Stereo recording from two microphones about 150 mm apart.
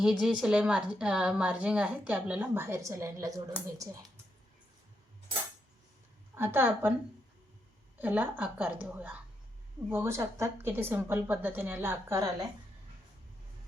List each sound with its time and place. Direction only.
0.0 s a woman's voice: 5° right (ahead or behind); by 3.4 s 20° right (ahead or behind)
6.3 s a woman's voice: 15° right (ahead or behind)
7.9 s a woman's voice: 10° right (ahead or behind)